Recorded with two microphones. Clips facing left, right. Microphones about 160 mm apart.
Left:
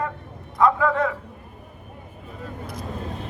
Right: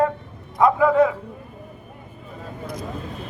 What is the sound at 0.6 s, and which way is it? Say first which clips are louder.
Speech: right 4 dB; 15° right (ahead or behind).